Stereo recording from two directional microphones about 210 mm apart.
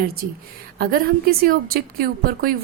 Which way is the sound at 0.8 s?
45° right (ahead or behind).